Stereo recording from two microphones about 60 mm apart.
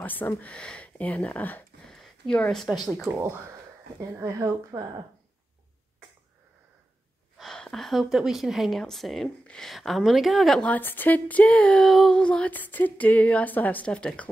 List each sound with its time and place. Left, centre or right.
0.0 s speech: left
1.9 s a sound: centre
2.5 s a woman's voice: centre
4.2 s a woman's voice: right
7.5 s a woman's voice: centre
10.8 s speech: left
11.8 s a woman's voice: centre
12.1 s a sound: centre
12.5 s speech: left
13.8 s a sound: centre